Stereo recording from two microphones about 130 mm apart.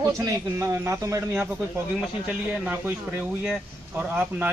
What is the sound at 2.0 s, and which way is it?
A man's voice, 10° right (ahead or behind).